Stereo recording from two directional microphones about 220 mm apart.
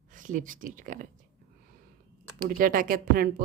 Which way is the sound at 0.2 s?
35° right (ahead or behind).